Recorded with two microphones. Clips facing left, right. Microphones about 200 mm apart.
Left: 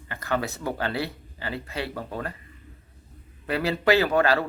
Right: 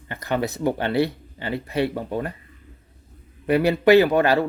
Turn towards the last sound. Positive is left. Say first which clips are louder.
# right 5 dB
turn(degrees=-20)  # may be behind; listen again after turning